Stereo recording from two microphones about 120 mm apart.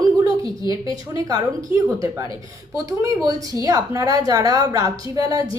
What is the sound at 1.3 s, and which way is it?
A woman's voice, 30° right (ahead or behind).